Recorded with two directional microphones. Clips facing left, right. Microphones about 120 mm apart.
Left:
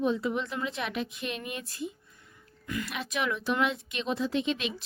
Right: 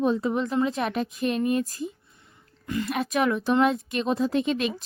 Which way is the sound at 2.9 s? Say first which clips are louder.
Right 9 dB; 45° right (ahead or behind).